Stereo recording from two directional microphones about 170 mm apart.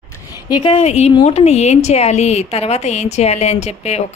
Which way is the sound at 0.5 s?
30° left (ahead or behind).